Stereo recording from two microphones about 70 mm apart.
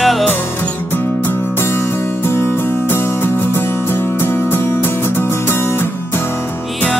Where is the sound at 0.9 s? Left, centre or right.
Left.